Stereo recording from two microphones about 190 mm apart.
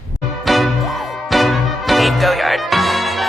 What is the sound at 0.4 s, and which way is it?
Music, centre (ahead or behind).